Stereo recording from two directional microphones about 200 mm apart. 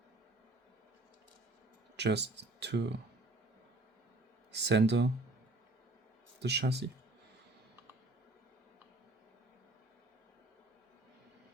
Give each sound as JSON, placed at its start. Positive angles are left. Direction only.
{"t": 2.0, "sound": "speech", "side_deg": -60}
{"t": 4.5, "sound": "speech", "side_deg": -55}
{"t": 6.4, "sound": "speech", "side_deg": -55}